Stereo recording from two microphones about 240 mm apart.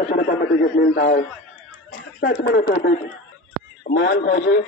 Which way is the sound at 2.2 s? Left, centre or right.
Left.